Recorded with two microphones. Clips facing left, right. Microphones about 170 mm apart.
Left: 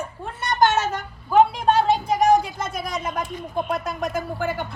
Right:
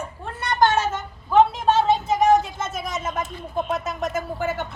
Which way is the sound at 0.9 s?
Centre (ahead or behind).